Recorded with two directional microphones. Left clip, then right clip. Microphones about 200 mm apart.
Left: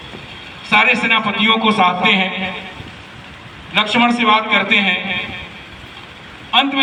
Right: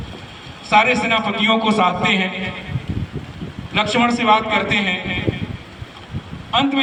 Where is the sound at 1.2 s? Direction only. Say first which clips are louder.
Left 3 dB; 55° right (ahead or behind).